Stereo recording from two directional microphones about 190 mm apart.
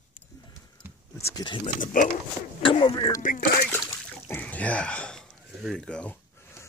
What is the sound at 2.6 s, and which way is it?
Speech, 25° left (ahead or behind).